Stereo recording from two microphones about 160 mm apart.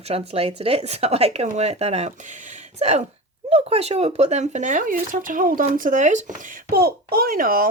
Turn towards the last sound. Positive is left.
turn(degrees=-65)  # may be behind; listen again after turning